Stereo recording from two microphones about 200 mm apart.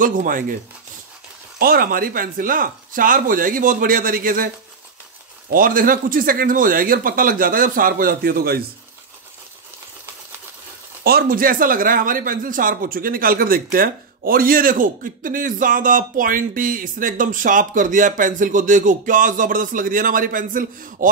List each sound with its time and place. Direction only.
0.0 s speech: 45° right (ahead or behind)
1.6 s speech: 45° right (ahead or behind)
5.5 s speech: 45° right (ahead or behind)
11.1 s speech: 50° right (ahead or behind)